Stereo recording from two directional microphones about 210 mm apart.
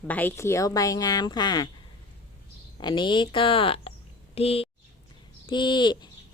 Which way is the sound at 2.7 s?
20° left (ahead or behind).